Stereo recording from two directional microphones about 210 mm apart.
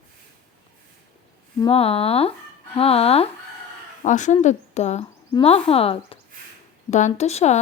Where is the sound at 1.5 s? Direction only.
25° left (ahead or behind).